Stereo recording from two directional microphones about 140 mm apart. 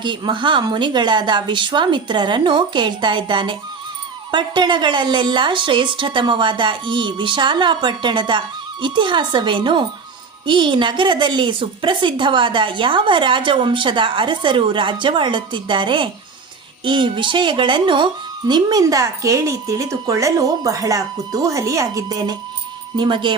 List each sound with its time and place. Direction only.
0.0 s a woman's voice: 35° right (ahead or behind)